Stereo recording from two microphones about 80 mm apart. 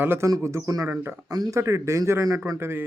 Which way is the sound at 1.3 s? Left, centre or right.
Right.